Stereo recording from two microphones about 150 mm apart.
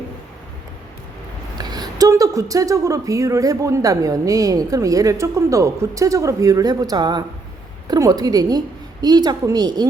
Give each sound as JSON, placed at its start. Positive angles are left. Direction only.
{"t": 1.5, "sound": "speech", "side_deg": -25}